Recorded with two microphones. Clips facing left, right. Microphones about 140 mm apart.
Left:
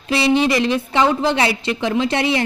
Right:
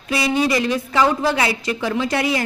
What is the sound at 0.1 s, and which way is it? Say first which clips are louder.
A woman's voice: left 3 dB; 25° left (ahead or behind).